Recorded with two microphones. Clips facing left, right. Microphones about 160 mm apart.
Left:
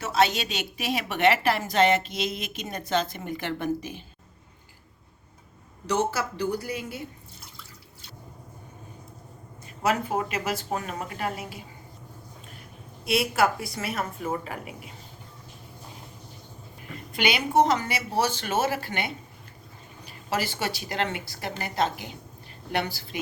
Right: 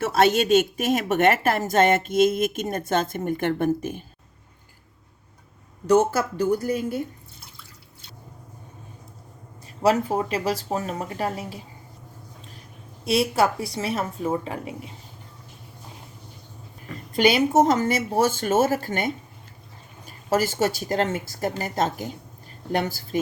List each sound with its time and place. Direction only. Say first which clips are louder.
0.0 s a woman's voice: right 5 dB; 50° right (ahead or behind)
5.8 s a woman's voice: right 7 dB; 50° right (ahead or behind)
9.8 s a woman's voice: right 5 dB; 35° right (ahead or behind)
13.1 s a woman's voice: right 3 dB; 30° right (ahead or behind)
17.2 s a woman's voice: right 5 dB; 40° right (ahead or behind)